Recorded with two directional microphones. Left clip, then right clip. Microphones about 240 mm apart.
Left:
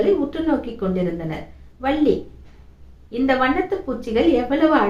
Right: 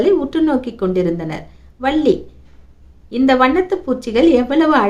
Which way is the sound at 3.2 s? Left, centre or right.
Right.